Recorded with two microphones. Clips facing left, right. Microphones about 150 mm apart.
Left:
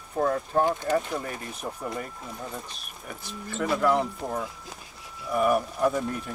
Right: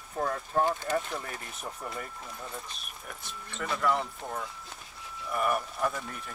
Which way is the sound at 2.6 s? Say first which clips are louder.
Left 3 dB; centre (ahead or behind).